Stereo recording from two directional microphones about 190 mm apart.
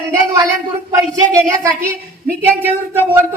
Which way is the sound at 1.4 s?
15° right (ahead or behind).